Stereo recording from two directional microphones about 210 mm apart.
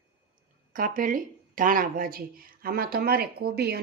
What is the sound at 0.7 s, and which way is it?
Speech, 40° right (ahead or behind).